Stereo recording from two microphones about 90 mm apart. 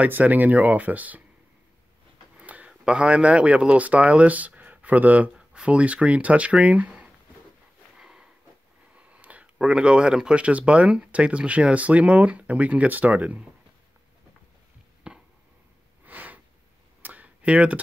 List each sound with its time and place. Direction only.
0.0 s speech: 20° right (ahead or behind)
2.3 s speech: 15° right (ahead or behind)
8.0 s sniff: 5° right (ahead or behind)
8.9 s speech: 15° right (ahead or behind)
15.0 s a sound: 10° right (ahead or behind)